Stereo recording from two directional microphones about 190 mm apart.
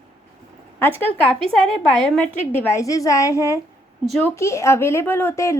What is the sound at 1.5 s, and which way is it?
Speech, 5° left (ahead or behind).